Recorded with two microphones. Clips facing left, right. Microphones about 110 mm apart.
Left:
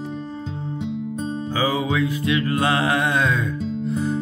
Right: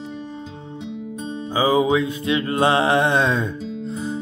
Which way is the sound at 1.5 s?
20° right (ahead or behind).